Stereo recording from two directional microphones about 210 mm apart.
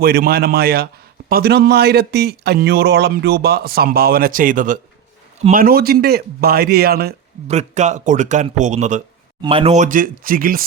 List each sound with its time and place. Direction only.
0.0 s speech: 45° right (ahead or behind)
7.4 s a man's voice: 35° right (ahead or behind)